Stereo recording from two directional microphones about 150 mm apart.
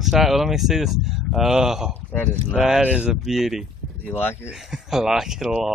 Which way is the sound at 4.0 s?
10° left (ahead or behind).